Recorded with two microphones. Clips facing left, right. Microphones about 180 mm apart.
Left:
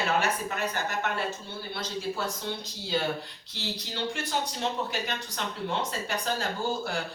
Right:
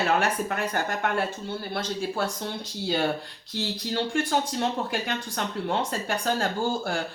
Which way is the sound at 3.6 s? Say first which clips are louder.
Right 6 dB; 50° right (ahead or behind).